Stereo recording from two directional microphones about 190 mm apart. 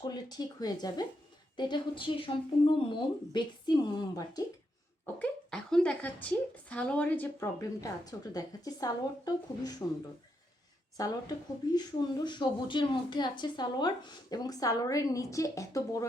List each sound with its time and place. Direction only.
0.0 s speech: 20° left (ahead or behind)
5.0 s speech: 5° left (ahead or behind)
10.9 s speech: 20° left (ahead or behind)